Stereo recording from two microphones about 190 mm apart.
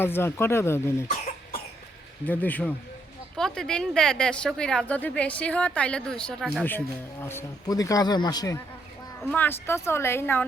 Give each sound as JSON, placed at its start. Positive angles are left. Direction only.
{"t": 0.0, "sound": "speech", "side_deg": 10}
{"t": 1.0, "sound": "speech", "side_deg": 35}
{"t": 2.2, "sound": "speech", "side_deg": 10}
{"t": 9.2, "sound": "speech", "side_deg": 10}